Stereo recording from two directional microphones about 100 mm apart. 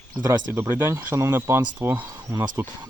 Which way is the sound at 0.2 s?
25° right (ahead or behind).